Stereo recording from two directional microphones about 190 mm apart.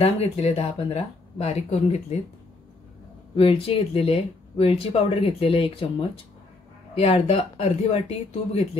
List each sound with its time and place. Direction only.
0.0 s speech: 35° left (ahead or behind)
3.3 s speech: 30° left (ahead or behind)